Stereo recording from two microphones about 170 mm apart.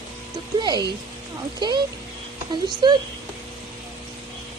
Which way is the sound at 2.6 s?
25° right (ahead or behind).